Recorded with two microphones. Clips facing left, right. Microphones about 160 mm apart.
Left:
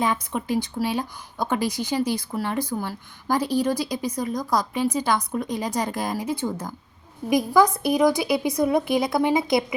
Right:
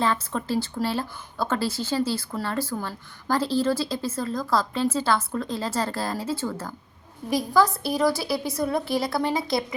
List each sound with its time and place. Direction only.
0.0 s speech: 15° left (ahead or behind)